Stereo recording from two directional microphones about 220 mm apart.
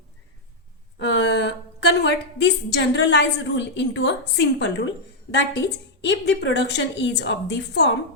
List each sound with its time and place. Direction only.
0.9 s a woman's voice: 50° left (ahead or behind)